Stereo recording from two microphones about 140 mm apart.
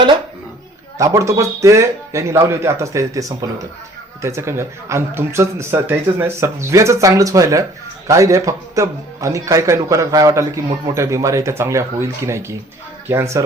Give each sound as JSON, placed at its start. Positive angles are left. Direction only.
{"t": 0.9, "sound": "a man's voice", "side_deg": -25}